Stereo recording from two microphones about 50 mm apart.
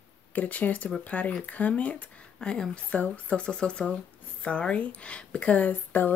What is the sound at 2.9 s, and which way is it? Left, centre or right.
Speech, left.